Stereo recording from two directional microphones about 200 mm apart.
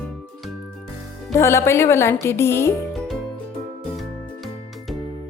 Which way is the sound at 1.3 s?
15° left (ahead or behind).